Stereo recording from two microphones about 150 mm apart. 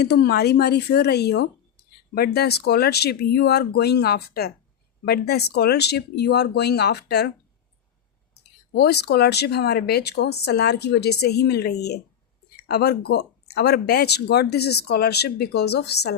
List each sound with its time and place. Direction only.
0.0 s speech: 90° left
8.7 s speech: 90° left